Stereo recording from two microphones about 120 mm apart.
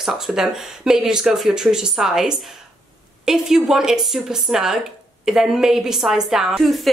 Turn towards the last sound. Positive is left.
turn(degrees=0)  # may be behind; listen again after turning